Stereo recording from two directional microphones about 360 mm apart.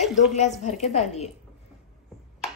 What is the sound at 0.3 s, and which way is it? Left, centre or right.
Speech, centre.